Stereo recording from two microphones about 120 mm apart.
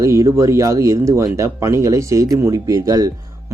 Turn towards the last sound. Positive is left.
turn(degrees=-30)  # may be behind; listen again after turning